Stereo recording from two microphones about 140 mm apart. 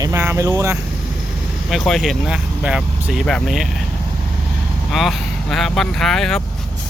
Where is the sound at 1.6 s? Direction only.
Centre (ahead or behind).